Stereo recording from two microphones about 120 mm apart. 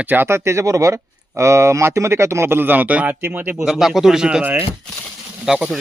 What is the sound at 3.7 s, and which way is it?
Speech, centre (ahead or behind).